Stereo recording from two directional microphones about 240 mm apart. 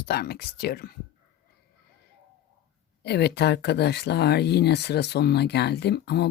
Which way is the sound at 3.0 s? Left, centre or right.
Left.